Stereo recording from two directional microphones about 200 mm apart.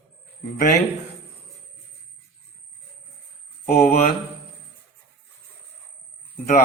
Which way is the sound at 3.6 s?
35° left (ahead or behind).